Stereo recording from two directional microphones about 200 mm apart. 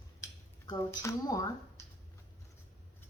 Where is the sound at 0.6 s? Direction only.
15° left (ahead or behind).